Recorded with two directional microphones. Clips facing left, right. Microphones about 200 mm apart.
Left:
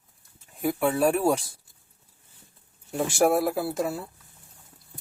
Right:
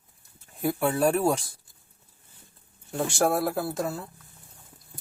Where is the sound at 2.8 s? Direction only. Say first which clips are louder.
Left 3 dB; 5° left (ahead or behind).